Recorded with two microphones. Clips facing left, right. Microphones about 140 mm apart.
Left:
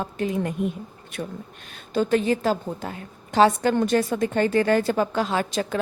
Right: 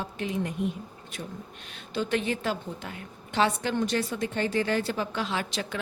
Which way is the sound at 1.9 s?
45° left (ahead or behind).